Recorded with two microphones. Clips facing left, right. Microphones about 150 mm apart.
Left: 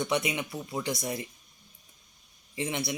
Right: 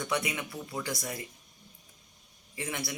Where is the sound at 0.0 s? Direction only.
20° left (ahead or behind).